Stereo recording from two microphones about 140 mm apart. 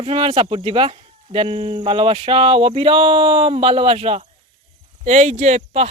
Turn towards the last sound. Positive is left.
turn(degrees=-50)  # may be behind; listen again after turning